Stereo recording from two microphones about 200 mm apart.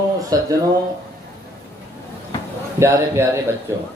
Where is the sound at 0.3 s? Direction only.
20° right (ahead or behind).